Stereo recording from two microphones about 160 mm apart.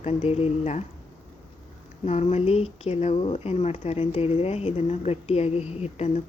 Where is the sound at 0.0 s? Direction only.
40° left (ahead or behind).